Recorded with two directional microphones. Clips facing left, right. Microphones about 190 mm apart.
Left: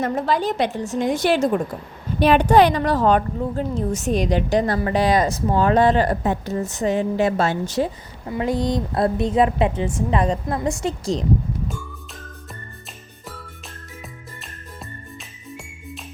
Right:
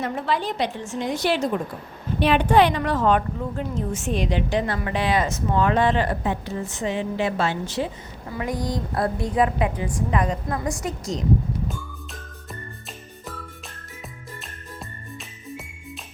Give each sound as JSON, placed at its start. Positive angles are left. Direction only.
{"t": 0.0, "sound": "a woman's voice", "side_deg": 40}
{"t": 8.3, "sound": "a woman's voice", "side_deg": 25}